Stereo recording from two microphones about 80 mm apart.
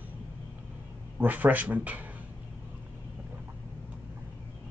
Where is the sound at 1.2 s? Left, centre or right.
Right.